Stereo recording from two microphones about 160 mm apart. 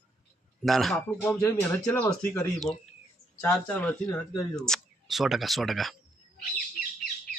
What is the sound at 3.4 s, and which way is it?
Speech, 20° left (ahead or behind).